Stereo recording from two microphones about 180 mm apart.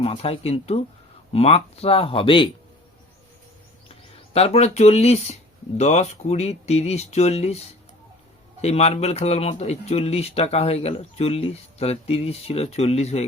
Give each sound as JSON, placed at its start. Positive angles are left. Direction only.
{"t": 0.0, "sound": "speech", "side_deg": 30}
{"t": 4.4, "sound": "speech", "side_deg": 35}
{"t": 8.6, "sound": "speech", "side_deg": 35}